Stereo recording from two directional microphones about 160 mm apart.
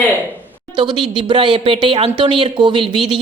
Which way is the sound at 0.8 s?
30° right (ahead or behind).